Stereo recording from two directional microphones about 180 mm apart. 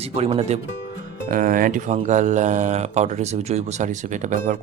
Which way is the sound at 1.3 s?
50° right (ahead or behind).